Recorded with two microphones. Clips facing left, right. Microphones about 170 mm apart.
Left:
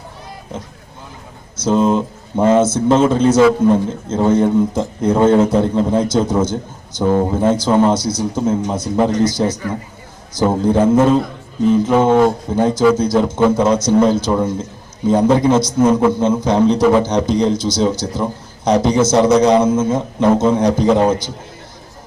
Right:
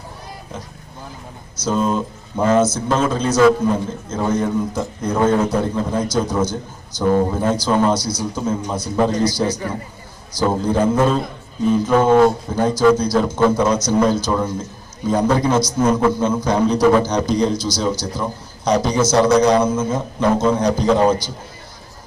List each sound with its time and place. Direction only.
1.6 s a man's voice: 25° left (ahead or behind)